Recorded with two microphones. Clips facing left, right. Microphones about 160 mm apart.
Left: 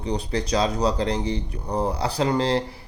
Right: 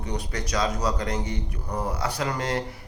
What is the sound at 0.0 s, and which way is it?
Speech, 30° left (ahead or behind).